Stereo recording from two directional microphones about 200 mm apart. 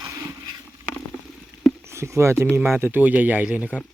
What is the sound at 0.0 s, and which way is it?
Vehicle, 20° right (ahead or behind).